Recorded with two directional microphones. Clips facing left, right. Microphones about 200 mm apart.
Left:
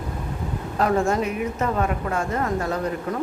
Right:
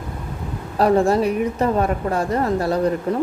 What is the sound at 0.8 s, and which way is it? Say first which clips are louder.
A woman's voice: right 5 dB; 35° right (ahead or behind).